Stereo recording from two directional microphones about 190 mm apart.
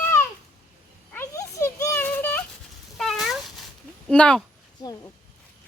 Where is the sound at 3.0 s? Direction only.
Centre (ahead or behind).